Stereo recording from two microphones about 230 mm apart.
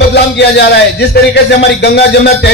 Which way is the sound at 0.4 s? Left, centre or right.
Left.